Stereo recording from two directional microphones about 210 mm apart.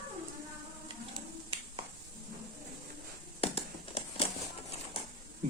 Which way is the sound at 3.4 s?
25° left (ahead or behind).